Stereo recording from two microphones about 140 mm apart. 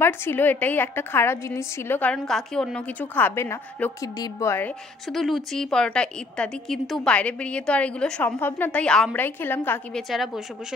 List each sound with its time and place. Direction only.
0.0 s a woman's voice: 15° left (ahead or behind)
2.1 s a woman's voice: 5° left (ahead or behind)
5.0 s a woman's voice: centre (ahead or behind)
10.0 s a woman's voice: centre (ahead or behind)